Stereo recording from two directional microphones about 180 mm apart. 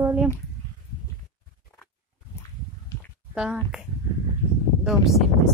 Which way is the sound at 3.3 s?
5° right (ahead or behind).